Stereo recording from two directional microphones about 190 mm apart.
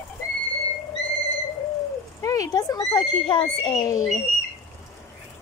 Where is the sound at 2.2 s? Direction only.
20° left (ahead or behind).